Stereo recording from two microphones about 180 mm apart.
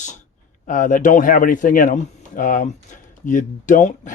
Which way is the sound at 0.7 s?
45° left (ahead or behind).